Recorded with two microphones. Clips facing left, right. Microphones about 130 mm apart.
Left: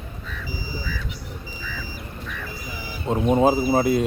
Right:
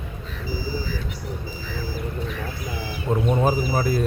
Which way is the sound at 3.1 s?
25° left (ahead or behind).